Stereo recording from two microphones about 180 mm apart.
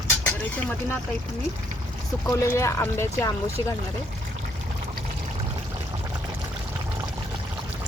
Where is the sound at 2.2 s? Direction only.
15° left (ahead or behind).